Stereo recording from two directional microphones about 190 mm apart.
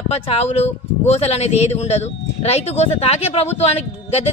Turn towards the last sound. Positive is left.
turn(degrees=30)  # may be behind; listen again after turning